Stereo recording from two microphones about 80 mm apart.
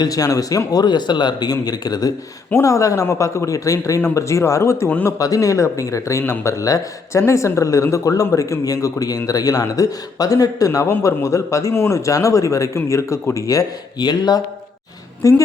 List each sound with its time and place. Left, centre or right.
0.0 s a man's voice: left
2.6 s a man's voice: left
10.8 s speech: left
14.0 s a man's voice: left
15.2 s speech: left